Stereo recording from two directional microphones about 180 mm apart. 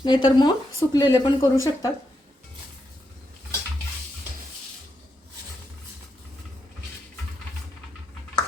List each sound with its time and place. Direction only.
0.0 s speech: 25° left (ahead or behind)